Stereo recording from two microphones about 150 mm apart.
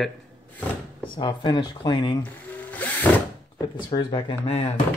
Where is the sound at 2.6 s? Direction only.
10° left (ahead or behind).